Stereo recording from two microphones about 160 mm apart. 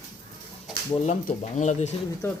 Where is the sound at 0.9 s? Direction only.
45° left (ahead or behind).